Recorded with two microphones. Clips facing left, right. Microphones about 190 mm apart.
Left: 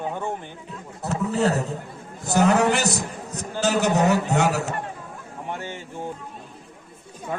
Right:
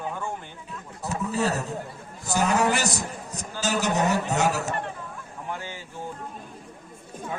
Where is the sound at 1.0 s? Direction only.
65° left (ahead or behind).